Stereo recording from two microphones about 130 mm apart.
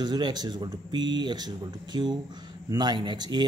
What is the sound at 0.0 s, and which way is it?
Speech, 35° right (ahead or behind).